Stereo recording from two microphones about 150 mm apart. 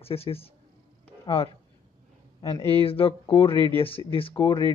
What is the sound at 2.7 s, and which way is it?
Speech, 40° left (ahead or behind).